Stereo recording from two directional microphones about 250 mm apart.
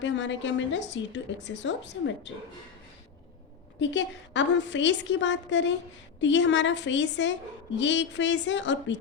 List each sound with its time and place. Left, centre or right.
0.0 s a woman's voice: left
3.8 s a woman's voice: left